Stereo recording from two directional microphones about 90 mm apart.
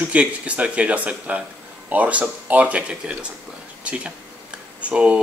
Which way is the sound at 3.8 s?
15° right (ahead or behind).